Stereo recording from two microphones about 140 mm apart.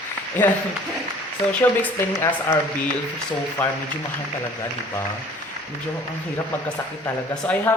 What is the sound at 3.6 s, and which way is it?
Speech, 10° left (ahead or behind).